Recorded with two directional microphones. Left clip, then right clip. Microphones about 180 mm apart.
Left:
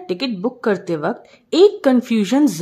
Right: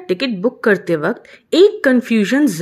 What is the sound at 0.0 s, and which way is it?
Speech, 5° right (ahead or behind).